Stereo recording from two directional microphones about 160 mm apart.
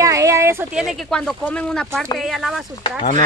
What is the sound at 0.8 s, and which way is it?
Speech, centre (ahead or behind).